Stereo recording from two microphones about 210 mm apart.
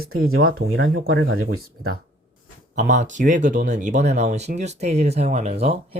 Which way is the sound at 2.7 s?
35° right (ahead or behind).